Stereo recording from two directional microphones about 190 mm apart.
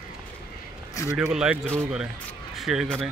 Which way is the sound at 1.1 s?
5° right (ahead or behind).